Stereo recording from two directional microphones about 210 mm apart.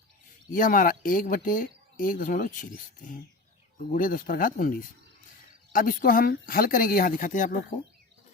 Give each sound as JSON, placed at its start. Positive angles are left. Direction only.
{"t": 0.5, "sound": "speech", "side_deg": 40}